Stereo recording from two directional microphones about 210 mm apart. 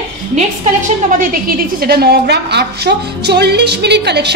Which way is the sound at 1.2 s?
45° right (ahead or behind).